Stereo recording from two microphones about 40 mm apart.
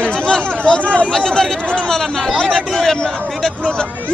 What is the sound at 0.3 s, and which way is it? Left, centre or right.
Chatter, left.